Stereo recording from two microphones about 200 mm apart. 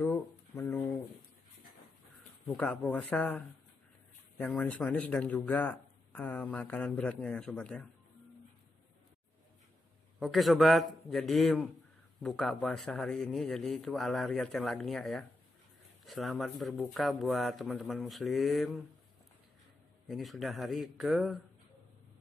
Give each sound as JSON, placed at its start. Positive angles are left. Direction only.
{"t": 0.6, "sound": "a sound", "side_deg": 10}
{"t": 2.4, "sound": "a man's voice", "side_deg": 5}
{"t": 10.1, "sound": "speech", "side_deg": 0}
{"t": 20.1, "sound": "speech", "side_deg": 0}